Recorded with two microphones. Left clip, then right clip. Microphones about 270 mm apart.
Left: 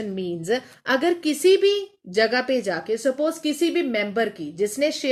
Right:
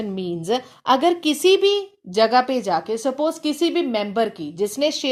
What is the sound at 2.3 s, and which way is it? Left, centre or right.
Speech, right.